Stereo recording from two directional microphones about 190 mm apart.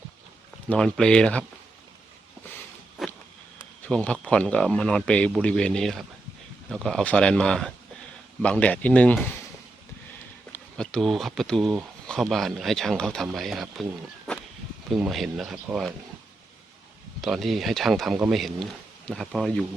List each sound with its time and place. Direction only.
0.7 s speech: 5° left (ahead or behind)
3.0 s walk: centre (ahead or behind)
3.8 s speech: 5° left (ahead or behind)
10.8 s speech: centre (ahead or behind)
14.8 s speech: centre (ahead or behind)
17.2 s speech: centre (ahead or behind)